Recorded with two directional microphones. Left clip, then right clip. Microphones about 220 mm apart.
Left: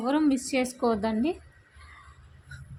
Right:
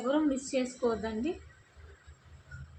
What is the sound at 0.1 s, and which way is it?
A woman's voice, 55° left (ahead or behind).